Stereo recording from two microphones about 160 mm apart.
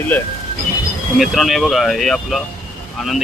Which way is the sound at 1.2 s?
Centre (ahead or behind).